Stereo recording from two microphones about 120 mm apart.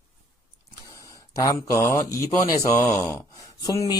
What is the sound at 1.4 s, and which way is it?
A man's voice, 25° left (ahead or behind).